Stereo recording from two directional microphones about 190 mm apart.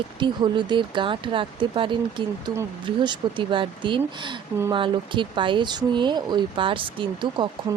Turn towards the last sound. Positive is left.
turn(degrees=-25)  # may be behind; listen again after turning